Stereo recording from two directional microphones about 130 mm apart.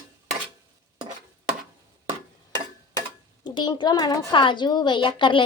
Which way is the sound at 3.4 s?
35° left (ahead or behind).